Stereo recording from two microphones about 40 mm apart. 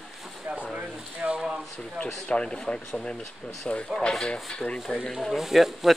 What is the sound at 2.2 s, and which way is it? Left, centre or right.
Speech, left.